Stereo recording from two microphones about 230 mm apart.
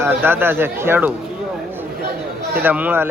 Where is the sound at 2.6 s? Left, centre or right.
Centre.